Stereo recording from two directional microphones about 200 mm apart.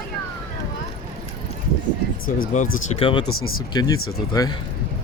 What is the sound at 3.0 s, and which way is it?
Speech, 25° left (ahead or behind).